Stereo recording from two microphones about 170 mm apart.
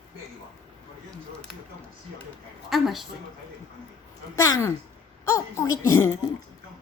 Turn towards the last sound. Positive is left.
turn(degrees=15)  # may be behind; listen again after turning